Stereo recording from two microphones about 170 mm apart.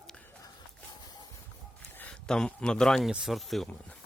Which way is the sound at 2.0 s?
5° left (ahead or behind).